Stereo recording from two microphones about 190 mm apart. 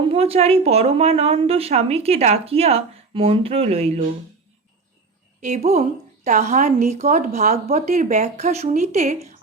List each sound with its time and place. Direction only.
0.0 s a woman's voice: 30° right (ahead or behind)
5.4 s a woman's voice: 40° right (ahead or behind)